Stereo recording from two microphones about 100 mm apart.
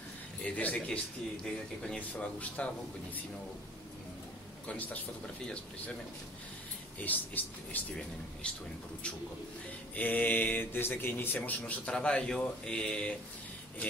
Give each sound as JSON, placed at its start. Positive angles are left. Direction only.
{"t": 0.4, "sound": "speech", "side_deg": 15}
{"t": 4.6, "sound": "speech", "side_deg": 15}
{"t": 7.1, "sound": "speech", "side_deg": 15}
{"t": 9.9, "sound": "speech", "side_deg": 15}